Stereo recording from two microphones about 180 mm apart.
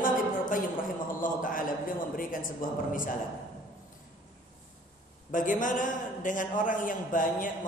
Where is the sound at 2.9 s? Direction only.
50° left (ahead or behind).